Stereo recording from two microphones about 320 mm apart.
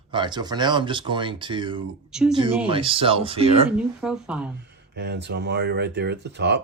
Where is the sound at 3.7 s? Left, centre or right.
Centre.